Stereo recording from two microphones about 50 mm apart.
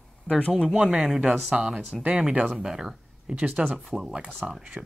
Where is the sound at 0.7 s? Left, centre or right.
Centre.